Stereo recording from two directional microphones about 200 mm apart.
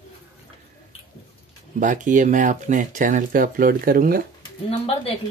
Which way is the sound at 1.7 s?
40° right (ahead or behind).